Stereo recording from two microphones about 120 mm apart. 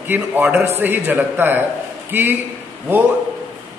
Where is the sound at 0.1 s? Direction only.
10° right (ahead or behind).